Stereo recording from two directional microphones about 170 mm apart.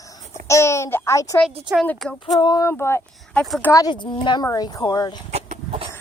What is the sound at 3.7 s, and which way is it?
Speech, 25° left (ahead or behind).